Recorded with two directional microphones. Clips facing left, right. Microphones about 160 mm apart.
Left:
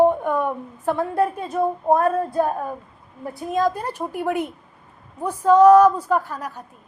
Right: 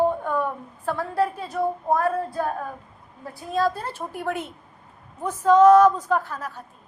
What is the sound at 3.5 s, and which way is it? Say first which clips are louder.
A woman's voice: left 2 dB; 15° left (ahead or behind).